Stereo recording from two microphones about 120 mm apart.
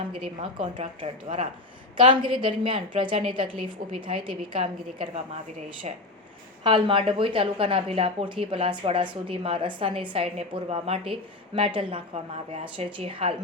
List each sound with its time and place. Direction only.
0.3 s a woman's voice: 45° right (ahead or behind)
0.8 s speech: 60° right (ahead or behind)
2.0 s a woman's voice: 45° right (ahead or behind); by 5.9 s 60° right (ahead or behind)
6.7 s a woman's voice: 45° right (ahead or behind)